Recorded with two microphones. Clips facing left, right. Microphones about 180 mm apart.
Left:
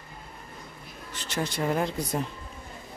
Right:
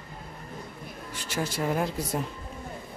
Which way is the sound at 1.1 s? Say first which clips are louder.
Even; 10° right (ahead or behind).